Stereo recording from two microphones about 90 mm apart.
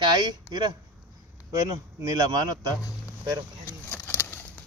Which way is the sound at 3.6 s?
20° left (ahead or behind).